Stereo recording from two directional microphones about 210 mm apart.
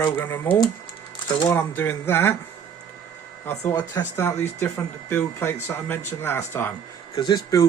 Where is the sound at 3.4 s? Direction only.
15° left (ahead or behind).